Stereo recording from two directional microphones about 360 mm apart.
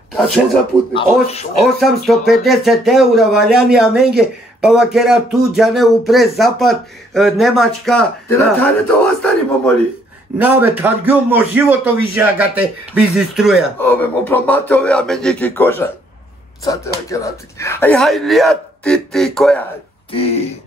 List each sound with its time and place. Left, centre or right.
0.1 s speech: centre
0.9 s speech: centre
1.6 s speech: centre
10.3 s speech: centre
20.1 s a sound: centre